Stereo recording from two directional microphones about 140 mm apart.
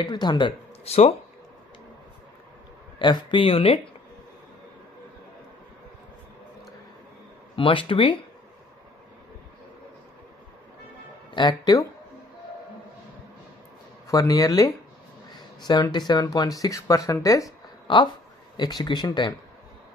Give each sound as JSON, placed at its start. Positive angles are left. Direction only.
{"t": 0.0, "sound": "speech", "side_deg": 30}
{"t": 0.8, "sound": "speech", "side_deg": 50}
{"t": 3.0, "sound": "speech", "side_deg": 35}
{"t": 7.5, "sound": "speech", "side_deg": 40}
{"t": 11.3, "sound": "speech", "side_deg": 30}
{"t": 14.0, "sound": "speech", "side_deg": 25}